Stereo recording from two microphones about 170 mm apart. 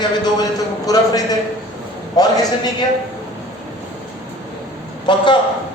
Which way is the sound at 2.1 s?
20° left (ahead or behind).